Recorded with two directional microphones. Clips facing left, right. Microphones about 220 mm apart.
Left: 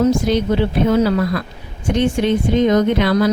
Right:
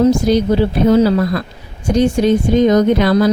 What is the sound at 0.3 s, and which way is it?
Speech, 40° right (ahead or behind).